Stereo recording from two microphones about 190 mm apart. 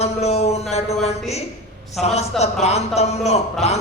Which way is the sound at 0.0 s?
35° left (ahead or behind).